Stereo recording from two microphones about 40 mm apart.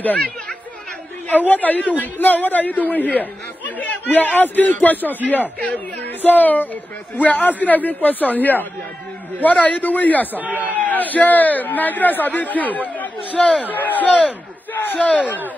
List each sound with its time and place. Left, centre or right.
1.3 s speech: left
10.3 s speech: right
10.7 s speech: left
13.7 s speech: left